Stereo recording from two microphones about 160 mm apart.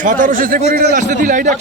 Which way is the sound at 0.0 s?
55° right (ahead or behind).